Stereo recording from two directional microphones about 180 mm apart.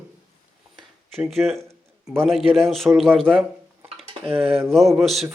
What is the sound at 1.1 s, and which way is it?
A man's voice, centre (ahead or behind).